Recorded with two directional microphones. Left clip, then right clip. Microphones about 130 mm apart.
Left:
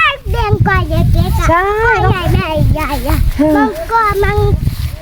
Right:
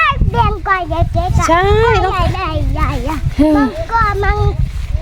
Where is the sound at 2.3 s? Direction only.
Centre (ahead or behind).